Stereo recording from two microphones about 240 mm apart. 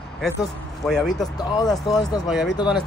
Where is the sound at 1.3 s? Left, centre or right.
Centre.